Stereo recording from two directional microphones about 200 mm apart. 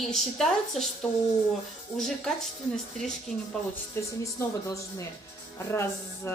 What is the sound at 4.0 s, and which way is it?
Speech, 15° left (ahead or behind).